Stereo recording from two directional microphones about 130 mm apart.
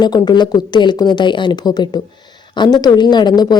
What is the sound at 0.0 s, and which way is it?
A woman's voice, 35° left (ahead or behind).